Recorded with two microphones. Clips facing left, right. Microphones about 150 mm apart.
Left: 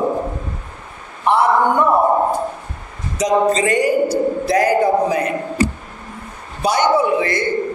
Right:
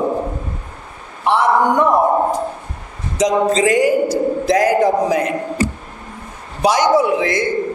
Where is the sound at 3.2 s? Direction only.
90° right.